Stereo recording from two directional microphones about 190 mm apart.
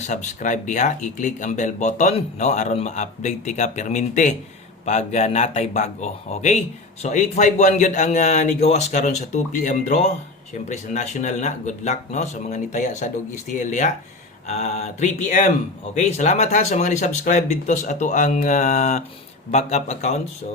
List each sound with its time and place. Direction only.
0.0 s speech: 40° left (ahead or behind)